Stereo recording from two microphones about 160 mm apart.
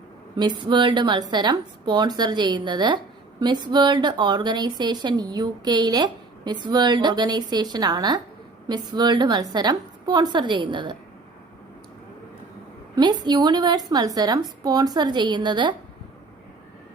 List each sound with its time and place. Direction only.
0.3 s speech: 30° right (ahead or behind)
13.2 s speech: 25° right (ahead or behind)